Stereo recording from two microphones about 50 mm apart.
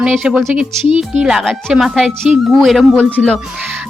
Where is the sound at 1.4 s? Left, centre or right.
Centre.